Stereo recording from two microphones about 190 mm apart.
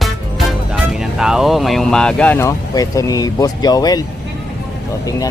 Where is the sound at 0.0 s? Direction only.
Centre (ahead or behind); by 4.0 s 20° left (ahead or behind).